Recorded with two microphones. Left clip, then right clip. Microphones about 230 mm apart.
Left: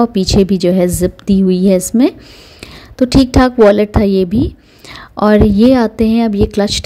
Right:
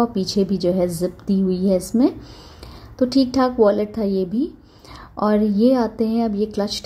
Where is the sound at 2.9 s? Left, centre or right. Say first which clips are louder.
Left 7 dB; left.